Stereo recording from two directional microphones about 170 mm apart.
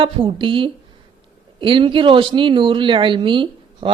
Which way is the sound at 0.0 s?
30° right (ahead or behind).